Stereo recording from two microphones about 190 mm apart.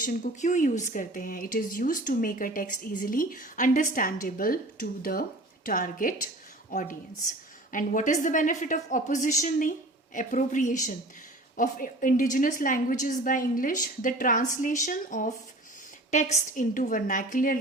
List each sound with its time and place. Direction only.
0.0 s a woman's voice: 40° left (ahead or behind)